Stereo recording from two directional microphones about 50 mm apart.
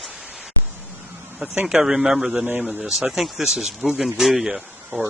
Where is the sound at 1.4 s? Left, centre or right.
Centre.